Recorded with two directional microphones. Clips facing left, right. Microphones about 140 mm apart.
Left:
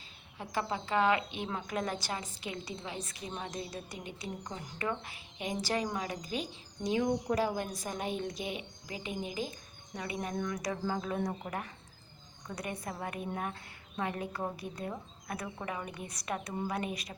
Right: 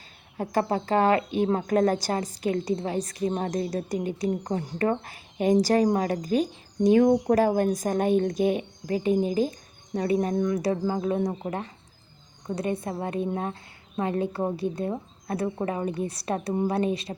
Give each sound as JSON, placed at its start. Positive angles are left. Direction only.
{"t": 0.3, "sound": "a woman's voice", "side_deg": -45}